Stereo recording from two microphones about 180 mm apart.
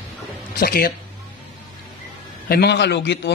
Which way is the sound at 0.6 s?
55° left (ahead or behind).